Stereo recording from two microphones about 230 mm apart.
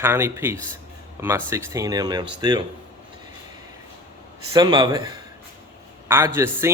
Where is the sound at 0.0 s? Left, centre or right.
Centre.